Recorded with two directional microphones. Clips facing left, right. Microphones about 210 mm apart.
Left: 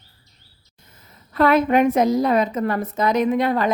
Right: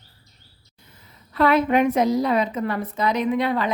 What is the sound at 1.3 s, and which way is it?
A woman's voice, 45° left (ahead or behind).